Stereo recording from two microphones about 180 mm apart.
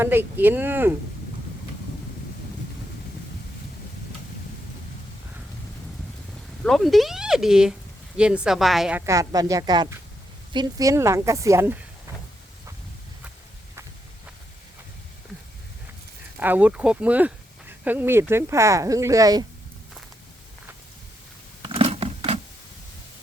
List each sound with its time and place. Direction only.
0.0 s speech: 10° right (ahead or behind)
6.7 s speech: centre (ahead or behind)
16.4 s speech: 10° right (ahead or behind)
21.6 s a sound: 35° right (ahead or behind)